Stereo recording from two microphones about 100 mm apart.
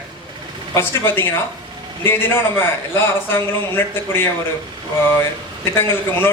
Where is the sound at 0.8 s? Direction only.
25° left (ahead or behind).